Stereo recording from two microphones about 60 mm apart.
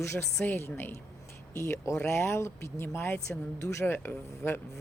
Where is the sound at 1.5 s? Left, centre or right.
Left.